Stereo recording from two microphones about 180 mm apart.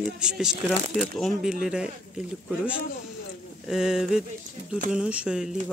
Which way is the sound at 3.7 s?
5° right (ahead or behind).